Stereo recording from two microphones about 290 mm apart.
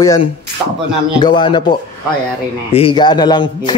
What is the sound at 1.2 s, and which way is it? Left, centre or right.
A man's voice, centre.